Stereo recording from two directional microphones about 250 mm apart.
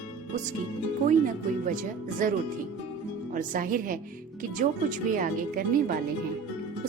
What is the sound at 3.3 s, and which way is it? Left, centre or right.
Speech, right.